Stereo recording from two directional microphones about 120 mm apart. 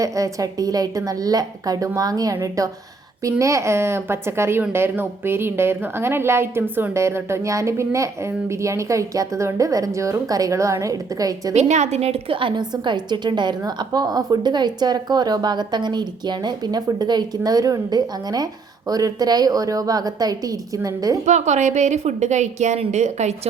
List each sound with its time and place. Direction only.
0.0 s a woman's voice: 30° right (ahead or behind)
11.5 s a woman's voice: 70° right (ahead or behind); by 21.2 s 30° right (ahead or behind)
21.2 s a woman's voice: 75° right (ahead or behind)